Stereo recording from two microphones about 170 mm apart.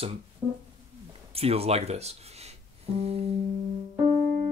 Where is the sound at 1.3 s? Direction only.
35° right (ahead or behind).